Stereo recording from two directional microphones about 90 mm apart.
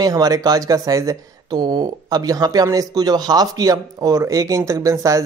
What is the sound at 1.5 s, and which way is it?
Speech, 50° right (ahead or behind).